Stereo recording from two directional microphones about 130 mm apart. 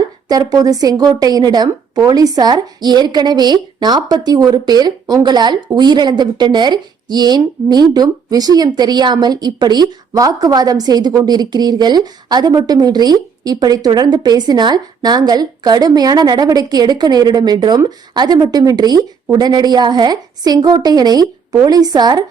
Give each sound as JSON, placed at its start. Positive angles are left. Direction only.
{"t": 0.3, "sound": "speech", "side_deg": -30}